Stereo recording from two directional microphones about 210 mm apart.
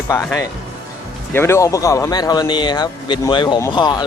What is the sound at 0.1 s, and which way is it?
Speech, 10° left (ahead or behind).